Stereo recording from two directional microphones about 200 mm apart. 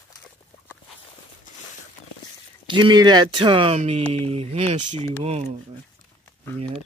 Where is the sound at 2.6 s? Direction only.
25° right (ahead or behind).